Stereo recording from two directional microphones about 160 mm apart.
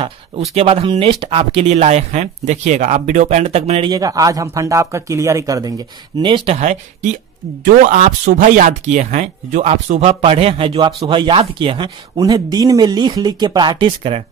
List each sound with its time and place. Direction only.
0.6 s speech: 35° right (ahead or behind)
3.9 s a man's voice: 20° right (ahead or behind); by 6.8 s 45° right (ahead or behind)
7.6 s speech: 55° right (ahead or behind); by 14.2 s 35° right (ahead or behind)